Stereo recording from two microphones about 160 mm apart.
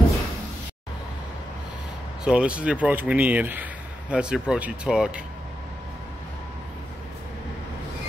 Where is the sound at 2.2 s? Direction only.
5° right (ahead or behind).